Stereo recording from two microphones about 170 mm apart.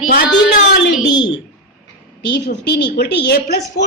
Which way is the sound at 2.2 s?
90° left.